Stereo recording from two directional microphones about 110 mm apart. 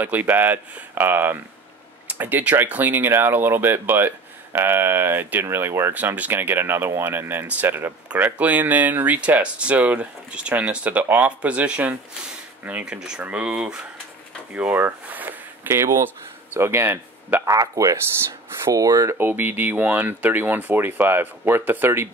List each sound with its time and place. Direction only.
0.0 s speech: 15° right (ahead or behind)
17.6 s speech: 30° right (ahead or behind)
19.1 s speech: 20° right (ahead or behind)